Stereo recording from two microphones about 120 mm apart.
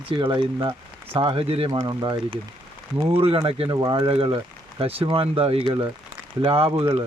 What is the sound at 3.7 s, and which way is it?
Speech, 30° right (ahead or behind).